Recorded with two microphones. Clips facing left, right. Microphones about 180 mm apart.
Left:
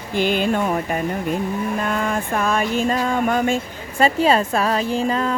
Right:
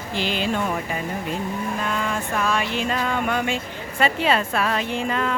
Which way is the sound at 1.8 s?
50° left (ahead or behind).